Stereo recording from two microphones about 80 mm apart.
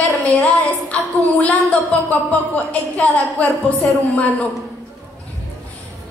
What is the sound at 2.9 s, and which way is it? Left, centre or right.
Speech, centre.